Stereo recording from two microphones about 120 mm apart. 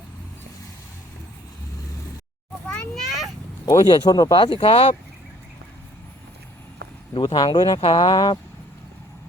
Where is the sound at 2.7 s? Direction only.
5° left (ahead or behind).